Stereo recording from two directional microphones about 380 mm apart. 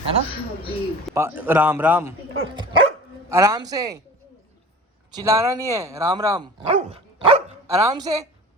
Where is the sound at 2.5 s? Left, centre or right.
Centre.